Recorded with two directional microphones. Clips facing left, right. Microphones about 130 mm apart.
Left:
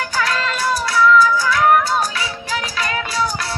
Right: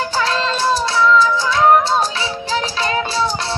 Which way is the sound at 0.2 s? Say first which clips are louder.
Right 2 dB; 25° right (ahead or behind).